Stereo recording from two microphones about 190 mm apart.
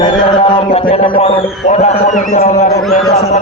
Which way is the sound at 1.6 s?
35° left (ahead or behind).